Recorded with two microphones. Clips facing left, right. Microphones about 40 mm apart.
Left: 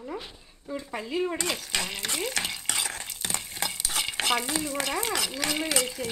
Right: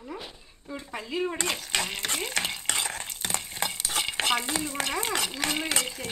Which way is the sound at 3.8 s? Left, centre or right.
Centre.